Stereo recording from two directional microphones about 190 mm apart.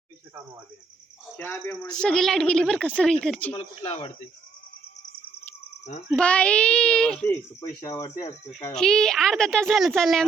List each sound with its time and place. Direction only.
1.4 s speech: 15° left (ahead or behind)
2.0 s speech: 5° left (ahead or behind)
3.5 s speech: 30° left (ahead or behind)
6.1 s speech: 5° left (ahead or behind)
7.8 s speech: 20° left (ahead or behind)
8.5 s speech: 5° left (ahead or behind)